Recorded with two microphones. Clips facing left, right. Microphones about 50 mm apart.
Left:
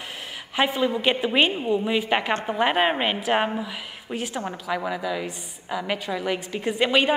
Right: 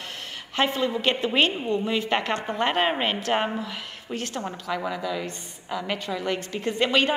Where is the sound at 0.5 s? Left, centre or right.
Centre.